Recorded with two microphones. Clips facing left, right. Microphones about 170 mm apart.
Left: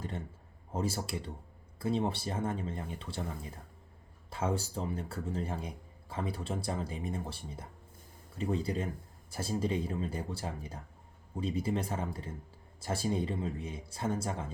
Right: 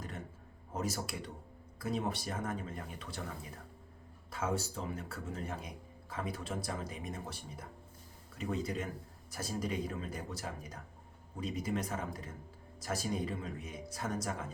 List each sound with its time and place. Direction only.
0.7 s speech: 30° left (ahead or behind)
4.3 s speech: 30° left (ahead or behind)